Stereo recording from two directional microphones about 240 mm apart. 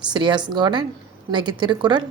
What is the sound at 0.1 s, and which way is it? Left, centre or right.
A woman's voice, centre.